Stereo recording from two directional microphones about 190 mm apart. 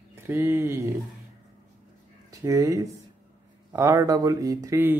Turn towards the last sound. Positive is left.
turn(degrees=-15)  # may be behind; listen again after turning